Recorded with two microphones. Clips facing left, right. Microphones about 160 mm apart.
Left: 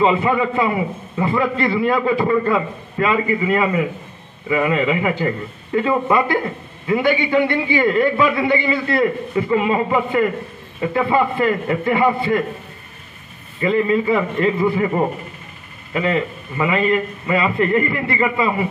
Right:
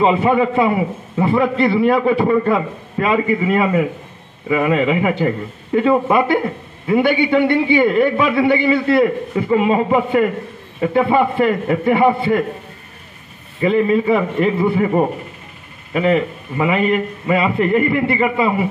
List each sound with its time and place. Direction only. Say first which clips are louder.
0.0 s a man's voice: right 2 dB; 25° right (ahead or behind)
13.6 s a man's voice: right 2 dB; 20° right (ahead or behind)